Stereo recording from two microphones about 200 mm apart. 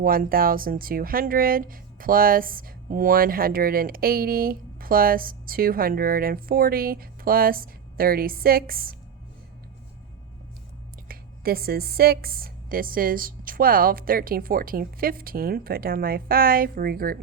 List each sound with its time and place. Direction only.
0.0 s speech: 45° right (ahead or behind)
11.1 s speech: 50° right (ahead or behind)